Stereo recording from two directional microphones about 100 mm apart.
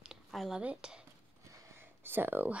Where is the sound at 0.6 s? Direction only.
10° right (ahead or behind).